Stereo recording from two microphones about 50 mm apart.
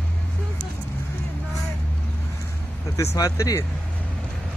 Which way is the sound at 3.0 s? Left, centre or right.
Left.